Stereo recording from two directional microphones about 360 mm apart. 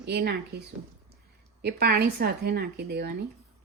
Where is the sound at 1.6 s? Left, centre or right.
Right.